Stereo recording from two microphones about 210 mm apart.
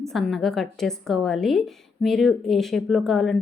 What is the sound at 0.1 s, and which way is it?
A woman's voice, centre (ahead or behind).